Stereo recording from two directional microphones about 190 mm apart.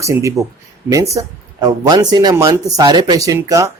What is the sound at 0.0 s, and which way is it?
Speech, 15° right (ahead or behind).